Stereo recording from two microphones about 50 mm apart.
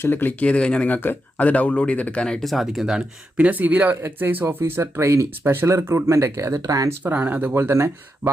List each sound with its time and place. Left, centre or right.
0.0 s speech: left
0.3 s speech: left
0.9 s speech: left
2.4 s speech: centre
3.3 s speech: right
3.6 s speech: right
4.6 s speech: right
5.4 s speech: right
5.6 s speech: right
7.0 s speech: right
7.5 s speech: right